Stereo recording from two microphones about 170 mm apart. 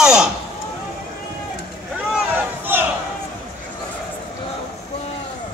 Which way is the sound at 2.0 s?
10° right (ahead or behind).